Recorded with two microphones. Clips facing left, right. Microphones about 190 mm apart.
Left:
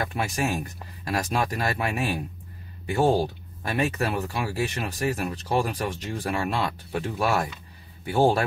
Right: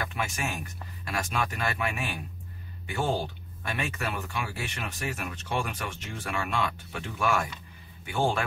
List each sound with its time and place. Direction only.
0.0 s speech: 35° left (ahead or behind)